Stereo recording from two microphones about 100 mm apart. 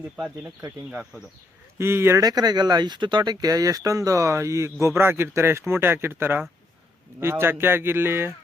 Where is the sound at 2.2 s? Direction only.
40° right (ahead or behind); by 8.3 s 25° right (ahead or behind).